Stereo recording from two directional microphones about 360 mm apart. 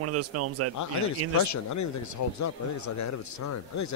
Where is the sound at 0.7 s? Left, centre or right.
Left.